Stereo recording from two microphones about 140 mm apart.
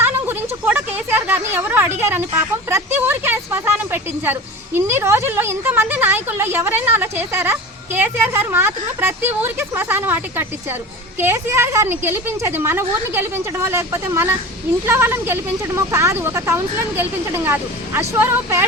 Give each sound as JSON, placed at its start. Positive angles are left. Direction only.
{"t": 0.0, "sound": "speech", "side_deg": -15}